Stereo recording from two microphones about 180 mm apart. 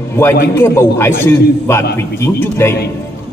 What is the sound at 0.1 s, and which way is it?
A man's voice, 15° left (ahead or behind).